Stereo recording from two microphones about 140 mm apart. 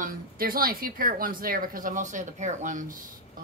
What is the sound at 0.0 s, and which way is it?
A woman's voice, 90° right.